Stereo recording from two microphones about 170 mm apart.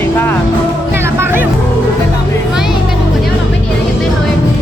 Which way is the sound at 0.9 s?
15° right (ahead or behind).